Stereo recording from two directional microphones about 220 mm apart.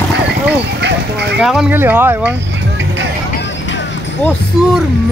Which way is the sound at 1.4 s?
5° right (ahead or behind).